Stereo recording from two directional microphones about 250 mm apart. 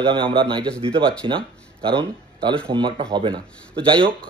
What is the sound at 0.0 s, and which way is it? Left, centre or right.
Speech, centre.